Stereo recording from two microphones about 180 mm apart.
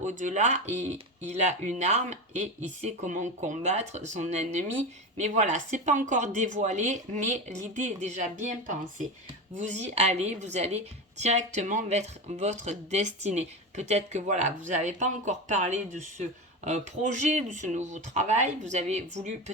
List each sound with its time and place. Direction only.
0.0 s speech: 45° right (ahead or behind)